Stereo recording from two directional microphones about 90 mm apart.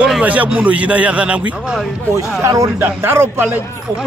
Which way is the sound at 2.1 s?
35° right (ahead or behind).